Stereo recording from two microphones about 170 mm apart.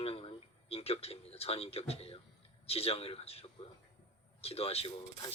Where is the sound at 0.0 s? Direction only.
35° left (ahead or behind).